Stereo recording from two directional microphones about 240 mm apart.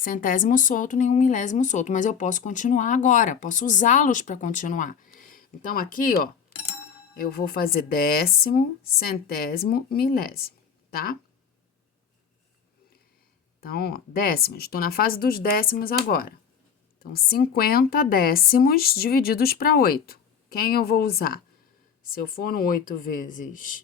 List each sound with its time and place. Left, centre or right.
0.0 s speech: left
13.6 s speech: left